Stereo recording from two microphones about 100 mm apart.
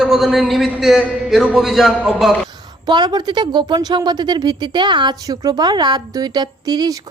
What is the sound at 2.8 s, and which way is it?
Speech, 45° right (ahead or behind).